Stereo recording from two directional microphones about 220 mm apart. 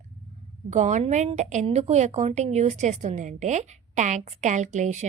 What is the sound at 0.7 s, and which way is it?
A woman's voice, 35° right (ahead or behind).